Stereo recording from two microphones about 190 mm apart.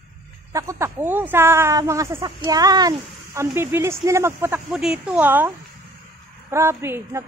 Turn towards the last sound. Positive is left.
turn(degrees=-15)  # may be behind; listen again after turning